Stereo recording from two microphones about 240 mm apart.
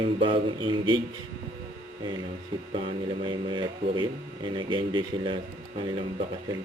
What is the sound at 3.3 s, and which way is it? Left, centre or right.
Speech, centre.